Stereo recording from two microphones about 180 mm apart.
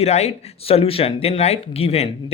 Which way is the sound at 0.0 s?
35° left (ahead or behind).